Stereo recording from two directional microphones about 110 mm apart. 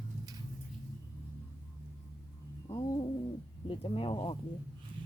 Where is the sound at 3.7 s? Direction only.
55° left (ahead or behind).